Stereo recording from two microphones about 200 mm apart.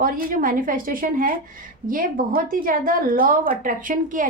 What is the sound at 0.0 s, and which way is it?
A woman's voice, 45° right (ahead or behind).